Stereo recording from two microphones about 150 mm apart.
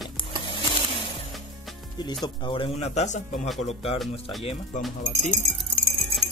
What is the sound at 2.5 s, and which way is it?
A man's voice, 40° left (ahead or behind).